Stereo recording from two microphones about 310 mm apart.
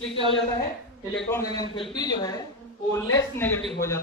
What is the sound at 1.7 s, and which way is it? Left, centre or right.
A man's voice, centre.